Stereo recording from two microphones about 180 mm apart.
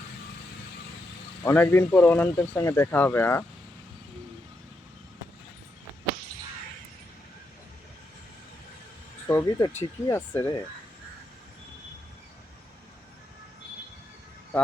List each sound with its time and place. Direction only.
1.5 s speech: 10° left (ahead or behind)
9.2 s speech: 15° left (ahead or behind)